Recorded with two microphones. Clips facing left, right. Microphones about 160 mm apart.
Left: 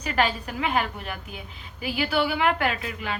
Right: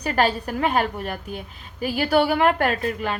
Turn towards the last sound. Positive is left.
turn(degrees=-45)  # may be behind; listen again after turning